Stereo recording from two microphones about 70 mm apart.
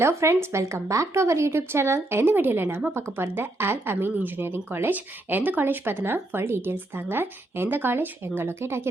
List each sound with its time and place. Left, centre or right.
0.0 s speech: right